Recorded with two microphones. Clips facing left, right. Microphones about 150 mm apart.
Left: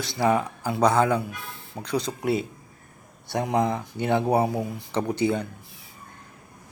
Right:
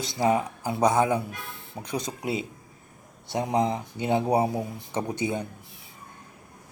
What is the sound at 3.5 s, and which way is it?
Speech, 20° right (ahead or behind).